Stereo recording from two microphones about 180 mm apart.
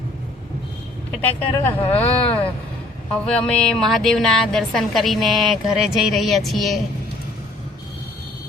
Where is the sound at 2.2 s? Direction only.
30° left (ahead or behind).